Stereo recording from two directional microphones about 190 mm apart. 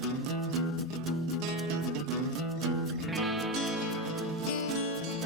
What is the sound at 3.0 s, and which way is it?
Music, centre (ahead or behind).